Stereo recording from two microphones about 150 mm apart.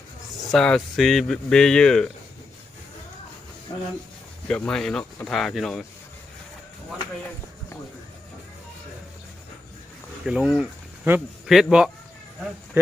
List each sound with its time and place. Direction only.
0.5 s speech: 5° left (ahead or behind)
4.4 s speech: 5° left (ahead or behind)
10.2 s speech: 5° right (ahead or behind)
12.8 s speech: 15° right (ahead or behind)